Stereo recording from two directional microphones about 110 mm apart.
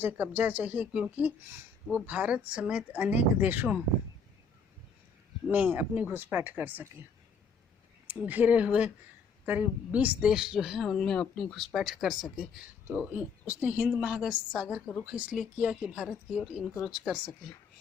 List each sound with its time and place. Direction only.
0.0 s a woman's voice: 15° right (ahead or behind)
5.5 s a woman's voice: 15° right (ahead or behind)
8.0 s a woman's voice: 10° right (ahead or behind)
12.9 s a woman's voice: 15° right (ahead or behind)